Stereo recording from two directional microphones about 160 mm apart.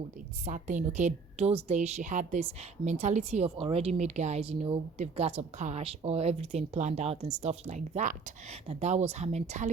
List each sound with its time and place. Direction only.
0.4 s a woman's voice: 55° right (ahead or behind)